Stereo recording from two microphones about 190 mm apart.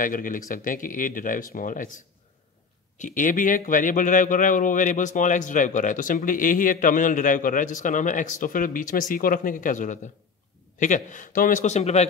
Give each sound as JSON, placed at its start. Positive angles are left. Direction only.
{"t": 0.0, "sound": "a man's voice", "side_deg": 45}